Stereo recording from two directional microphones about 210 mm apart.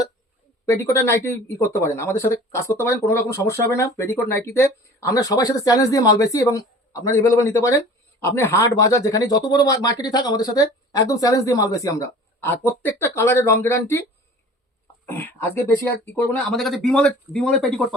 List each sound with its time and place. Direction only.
0.6 s speech: 15° left (ahead or behind)
15.0 s speech: 10° left (ahead or behind)